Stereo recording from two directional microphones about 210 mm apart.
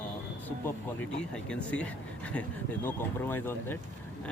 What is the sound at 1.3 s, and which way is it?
Speech, 5° left (ahead or behind).